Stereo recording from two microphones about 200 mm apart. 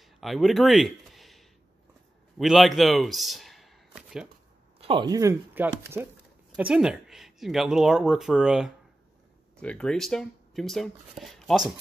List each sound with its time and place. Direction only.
0.0 s a sound: centre (ahead or behind)
2.3 s a man's voice: centre (ahead or behind)
4.7 s speech: 25° right (ahead or behind); by 11.6 s centre (ahead or behind)